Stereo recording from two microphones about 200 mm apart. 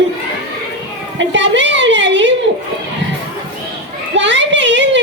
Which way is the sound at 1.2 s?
65° right (ahead or behind).